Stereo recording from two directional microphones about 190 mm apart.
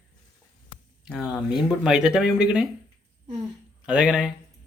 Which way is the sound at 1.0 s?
5° right (ahead or behind).